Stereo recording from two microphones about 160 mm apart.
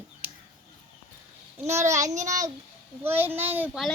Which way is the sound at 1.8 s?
20° right (ahead or behind).